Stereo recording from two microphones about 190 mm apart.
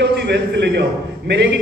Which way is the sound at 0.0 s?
60° right (ahead or behind).